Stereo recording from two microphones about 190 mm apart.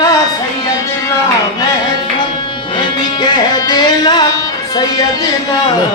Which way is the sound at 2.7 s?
25° left (ahead or behind).